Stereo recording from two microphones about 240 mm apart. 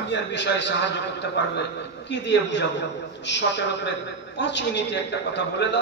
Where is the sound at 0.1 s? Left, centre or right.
Left.